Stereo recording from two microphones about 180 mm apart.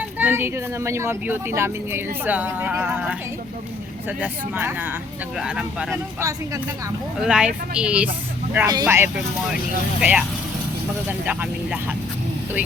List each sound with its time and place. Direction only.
0.2 s speech: 10° right (ahead or behind)
4.2 s speech: 10° right (ahead or behind)
6.1 s speech: 20° right (ahead or behind)
7.2 s speech: 5° right (ahead or behind)
8.6 s speech: 20° right (ahead or behind)
11.3 s speech: 10° right (ahead or behind)